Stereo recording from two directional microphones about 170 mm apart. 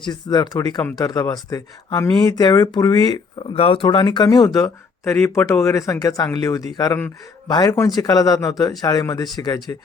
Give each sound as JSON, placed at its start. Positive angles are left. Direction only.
{"t": 0.0, "sound": "speech", "side_deg": 25}